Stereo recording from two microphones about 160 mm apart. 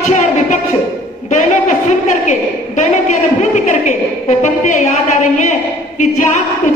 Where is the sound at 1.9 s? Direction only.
50° left (ahead or behind).